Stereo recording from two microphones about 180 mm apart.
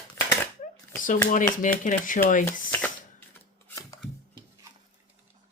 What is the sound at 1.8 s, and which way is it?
Speech, 45° left (ahead or behind).